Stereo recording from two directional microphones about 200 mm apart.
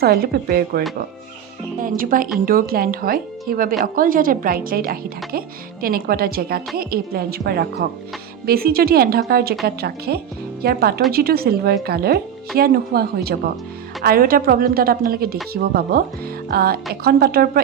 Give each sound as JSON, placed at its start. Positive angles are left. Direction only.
{"t": 0.0, "sound": "speech", "side_deg": -50}
{"t": 2.0, "sound": "speech", "side_deg": -45}